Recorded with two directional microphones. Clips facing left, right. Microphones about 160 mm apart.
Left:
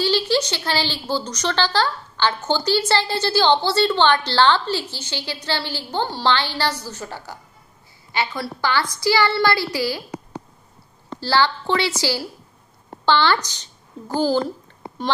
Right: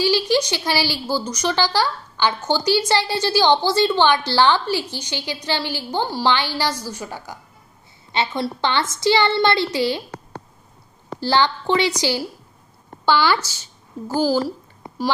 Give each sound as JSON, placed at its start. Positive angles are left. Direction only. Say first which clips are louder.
{"t": 0.0, "sound": "a woman's voice", "louder": "right 1 dB", "side_deg": -10}
{"t": 11.1, "sound": "a woman's voice", "louder": "right 1 dB", "side_deg": -15}